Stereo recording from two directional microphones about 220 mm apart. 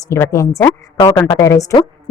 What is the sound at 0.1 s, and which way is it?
A woman's voice, 15° left (ahead or behind).